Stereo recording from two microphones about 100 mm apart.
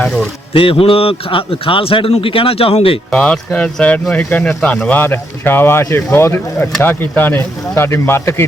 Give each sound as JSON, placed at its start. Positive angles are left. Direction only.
{"t": 0.0, "sound": "a sound", "side_deg": 5}
{"t": 0.5, "sound": "a man's voice", "side_deg": 65}
{"t": 3.1, "sound": "speech", "side_deg": 10}